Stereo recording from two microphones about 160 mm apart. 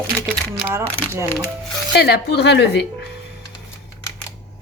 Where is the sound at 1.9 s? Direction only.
90° left.